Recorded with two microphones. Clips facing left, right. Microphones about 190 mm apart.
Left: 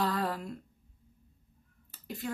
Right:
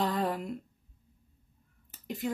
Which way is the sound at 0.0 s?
20° right (ahead or behind).